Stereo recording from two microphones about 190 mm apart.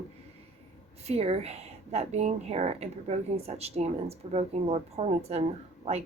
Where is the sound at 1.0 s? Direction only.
35° right (ahead or behind).